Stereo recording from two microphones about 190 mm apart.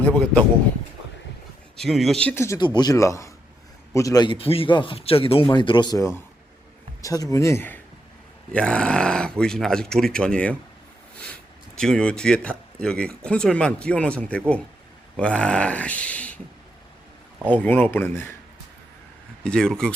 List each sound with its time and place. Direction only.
0.0 s a man's voice: 5° left (ahead or behind)
1.7 s a man's voice: centre (ahead or behind)
11.8 s a man's voice: 5° left (ahead or behind)
17.5 s a man's voice: 10° left (ahead or behind)
19.5 s speech: 5° left (ahead or behind)